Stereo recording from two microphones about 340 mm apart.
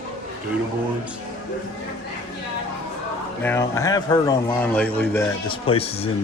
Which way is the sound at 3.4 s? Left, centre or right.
Centre.